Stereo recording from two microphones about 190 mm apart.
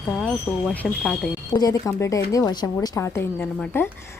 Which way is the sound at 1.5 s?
20° left (ahead or behind).